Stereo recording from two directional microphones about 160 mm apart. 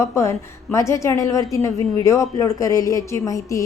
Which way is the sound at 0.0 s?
20° left (ahead or behind).